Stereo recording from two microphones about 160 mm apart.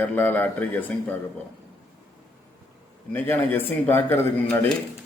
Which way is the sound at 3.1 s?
10° left (ahead or behind).